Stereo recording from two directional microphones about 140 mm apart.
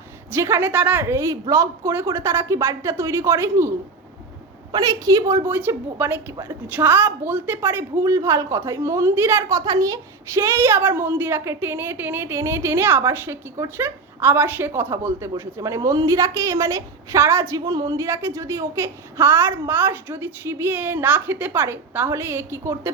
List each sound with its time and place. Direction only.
0.3 s a woman's voice: 15° right (ahead or behind)
4.7 s a woman's voice: 25° right (ahead or behind)